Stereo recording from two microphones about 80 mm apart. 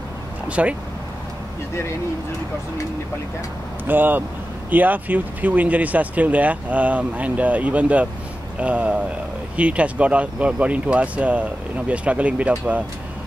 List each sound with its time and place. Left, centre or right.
0.5 s speech: centre
3.8 s speech: right